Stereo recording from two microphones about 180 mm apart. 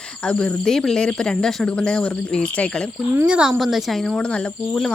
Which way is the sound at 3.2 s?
5° right (ahead or behind).